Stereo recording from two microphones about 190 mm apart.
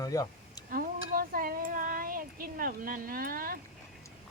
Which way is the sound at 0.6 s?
50° right (ahead or behind).